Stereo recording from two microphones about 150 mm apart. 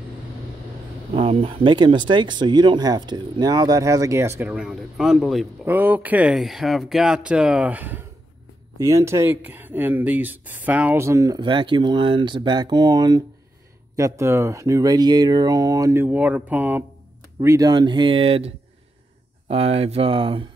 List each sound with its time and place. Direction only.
1.1 s speech: 40° right (ahead or behind); by 4.6 s 15° right (ahead or behind)
4.6 s a man's voice: 5° right (ahead or behind)
5.7 s speech: 10° right (ahead or behind)
8.7 s speech: 20° right (ahead or behind)
17.4 s speech: 20° right (ahead or behind)